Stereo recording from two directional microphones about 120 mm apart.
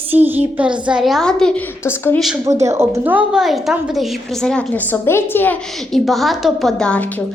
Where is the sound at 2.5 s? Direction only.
25° right (ahead or behind).